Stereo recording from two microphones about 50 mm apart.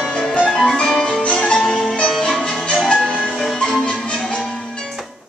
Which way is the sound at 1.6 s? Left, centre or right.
Centre.